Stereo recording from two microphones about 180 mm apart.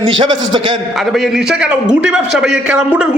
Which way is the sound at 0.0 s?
25° right (ahead or behind).